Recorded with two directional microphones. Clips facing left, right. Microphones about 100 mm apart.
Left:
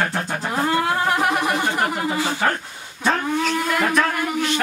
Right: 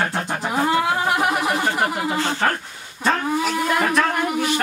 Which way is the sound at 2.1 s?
10° left (ahead or behind).